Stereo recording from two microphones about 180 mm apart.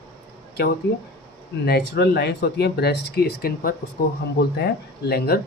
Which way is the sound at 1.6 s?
65° left (ahead or behind).